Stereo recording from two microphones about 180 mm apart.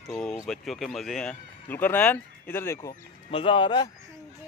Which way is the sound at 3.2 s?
30° left (ahead or behind).